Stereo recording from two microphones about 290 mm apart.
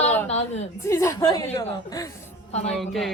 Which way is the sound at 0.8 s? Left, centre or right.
Centre.